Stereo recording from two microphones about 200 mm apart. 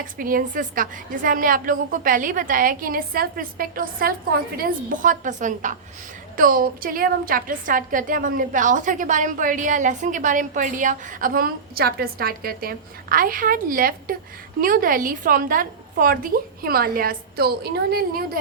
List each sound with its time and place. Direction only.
0.0 s a woman's voice: 45° right (ahead or behind)